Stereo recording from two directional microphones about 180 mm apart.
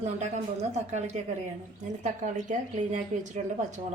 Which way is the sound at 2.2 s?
45° right (ahead or behind).